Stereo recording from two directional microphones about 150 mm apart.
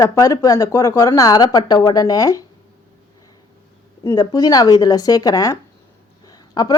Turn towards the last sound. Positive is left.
turn(degrees=25)  # may be behind; listen again after turning